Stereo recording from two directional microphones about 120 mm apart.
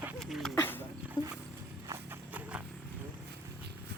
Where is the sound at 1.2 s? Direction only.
30° left (ahead or behind).